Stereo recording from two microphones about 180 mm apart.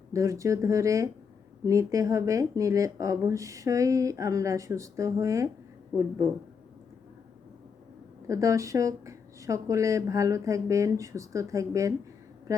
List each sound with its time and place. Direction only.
0.1 s speech: 15° right (ahead or behind)
8.3 s speech: 15° right (ahead or behind)